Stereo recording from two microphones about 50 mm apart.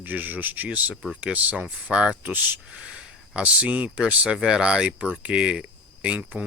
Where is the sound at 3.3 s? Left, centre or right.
Right.